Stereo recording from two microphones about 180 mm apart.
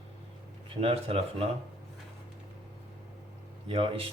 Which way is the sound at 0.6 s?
30° right (ahead or behind).